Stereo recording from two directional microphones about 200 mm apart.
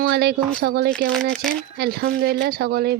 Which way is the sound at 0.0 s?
50° right (ahead or behind).